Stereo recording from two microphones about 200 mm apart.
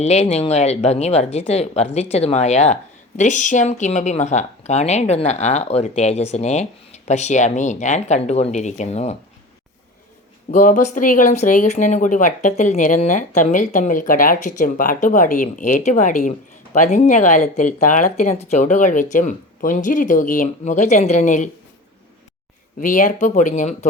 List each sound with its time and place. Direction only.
0.0 s speech: 35° left (ahead or behind)
10.5 s speech: 40° left (ahead or behind)
22.8 s speech: 40° left (ahead or behind)